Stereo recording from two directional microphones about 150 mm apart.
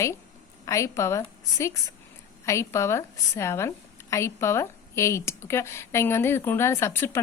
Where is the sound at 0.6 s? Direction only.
20° left (ahead or behind).